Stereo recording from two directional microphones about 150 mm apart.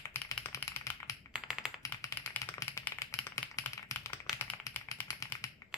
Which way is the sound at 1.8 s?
20° left (ahead or behind).